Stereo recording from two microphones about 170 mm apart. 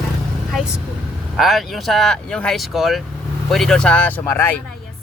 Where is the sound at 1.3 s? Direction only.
Centre (ahead or behind).